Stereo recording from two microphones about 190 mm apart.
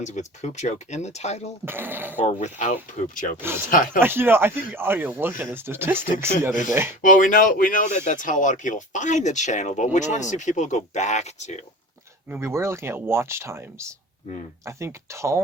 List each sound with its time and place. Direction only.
0.0 s speech: 40° left (ahead or behind)
1.6 s speech: 10° right (ahead or behind)
2.2 s speech: 40° left (ahead or behind)
4.0 s speech: 10° right (ahead or behind)
6.5 s speech: 40° left (ahead or behind)
12.3 s speech: 15° right (ahead or behind)